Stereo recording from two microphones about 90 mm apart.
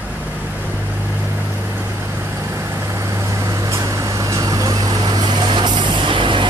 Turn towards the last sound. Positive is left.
turn(degrees=-65)  # may be behind; listen again after turning